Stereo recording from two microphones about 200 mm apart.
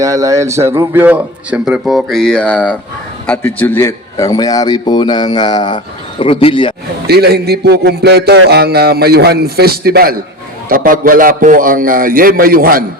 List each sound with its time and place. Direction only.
0.0 s a man's voice: 15° right (ahead or behind); by 6.7 s 25° left (ahead or behind)
7.1 s a man's voice: 55° right (ahead or behind)